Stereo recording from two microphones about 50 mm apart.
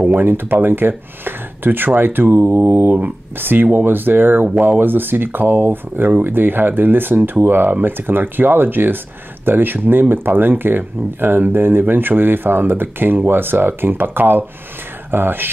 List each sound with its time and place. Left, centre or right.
0.0 s speech: right